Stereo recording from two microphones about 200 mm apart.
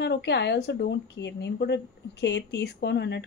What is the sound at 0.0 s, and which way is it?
A woman's voice, 55° left (ahead or behind).